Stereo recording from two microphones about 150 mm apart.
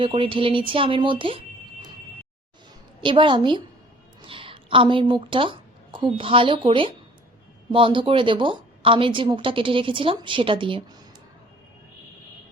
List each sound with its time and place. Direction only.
0.0 s speech: 35° right (ahead or behind)
3.0 s a woman's voice: 35° right (ahead or behind)